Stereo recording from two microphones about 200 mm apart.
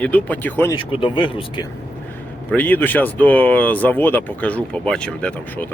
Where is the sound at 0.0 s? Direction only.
10° left (ahead or behind).